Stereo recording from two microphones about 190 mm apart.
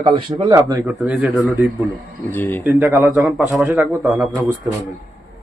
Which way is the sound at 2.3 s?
10° left (ahead or behind).